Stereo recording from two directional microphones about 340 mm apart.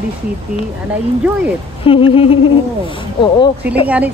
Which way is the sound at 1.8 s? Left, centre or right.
Centre.